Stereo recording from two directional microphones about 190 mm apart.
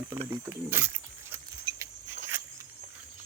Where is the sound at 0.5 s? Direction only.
10° right (ahead or behind).